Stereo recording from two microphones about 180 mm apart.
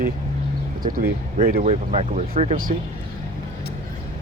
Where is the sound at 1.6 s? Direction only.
35° right (ahead or behind).